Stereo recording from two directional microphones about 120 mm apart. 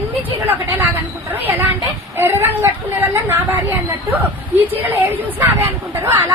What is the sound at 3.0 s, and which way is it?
Chatter, 15° right (ahead or behind).